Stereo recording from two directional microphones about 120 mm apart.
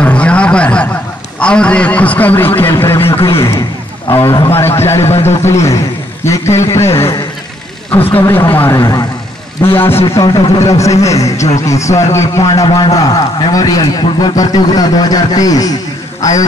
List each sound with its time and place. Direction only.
0.0 s a sound: 10° left (ahead or behind)
1.4 s a man's voice: 10° left (ahead or behind)
10.2 s a man's voice: 30° left (ahead or behind)
12.6 s a man's voice: 40° left (ahead or behind)